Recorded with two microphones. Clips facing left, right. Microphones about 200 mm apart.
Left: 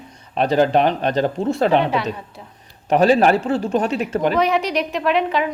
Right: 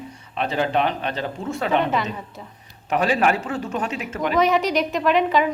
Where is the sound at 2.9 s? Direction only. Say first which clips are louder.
Left 6 dB; 35° left (ahead or behind).